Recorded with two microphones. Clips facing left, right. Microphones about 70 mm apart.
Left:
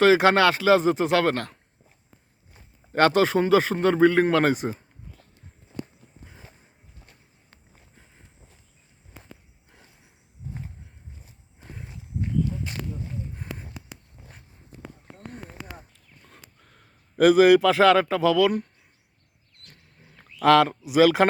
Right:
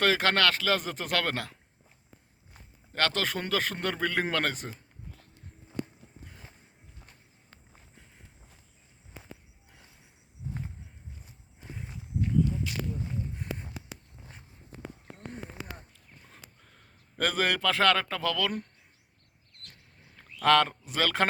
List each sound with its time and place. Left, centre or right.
0.0 s speech: centre
2.9 s speech: left
3.2 s speech: centre
4.4 s speech: centre
12.7 s a sound: left
16.2 s a sound: centre
19.6 s bird: centre